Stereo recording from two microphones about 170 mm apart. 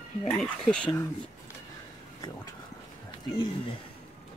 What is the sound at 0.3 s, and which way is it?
Speech, 5° left (ahead or behind).